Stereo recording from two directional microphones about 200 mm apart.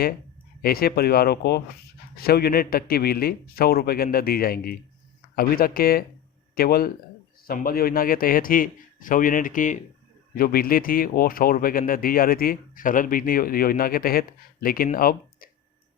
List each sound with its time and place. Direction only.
0.6 s speech: 50° left (ahead or behind)